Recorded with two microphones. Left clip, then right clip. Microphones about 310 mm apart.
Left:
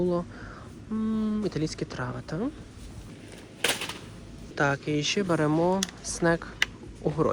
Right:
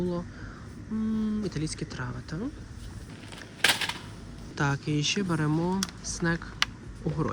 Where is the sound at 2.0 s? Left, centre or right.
Left.